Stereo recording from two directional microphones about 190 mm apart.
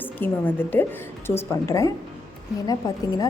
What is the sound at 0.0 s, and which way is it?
A woman's voice, 10° left (ahead or behind).